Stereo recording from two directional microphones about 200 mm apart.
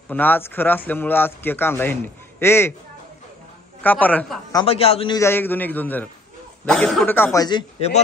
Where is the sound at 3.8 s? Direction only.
10° left (ahead or behind).